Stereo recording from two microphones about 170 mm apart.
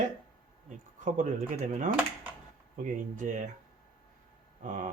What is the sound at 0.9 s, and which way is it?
Speech, 50° right (ahead or behind).